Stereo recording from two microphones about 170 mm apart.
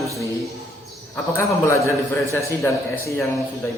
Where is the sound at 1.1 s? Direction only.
15° left (ahead or behind).